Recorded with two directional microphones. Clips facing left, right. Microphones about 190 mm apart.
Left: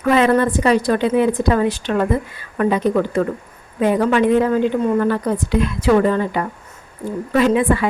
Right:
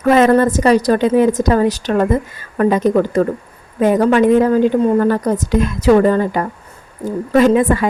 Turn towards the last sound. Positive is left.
turn(degrees=-40)  # may be behind; listen again after turning